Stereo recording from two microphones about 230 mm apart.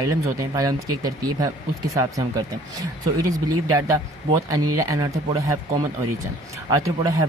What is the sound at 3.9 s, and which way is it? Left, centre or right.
Speech, centre.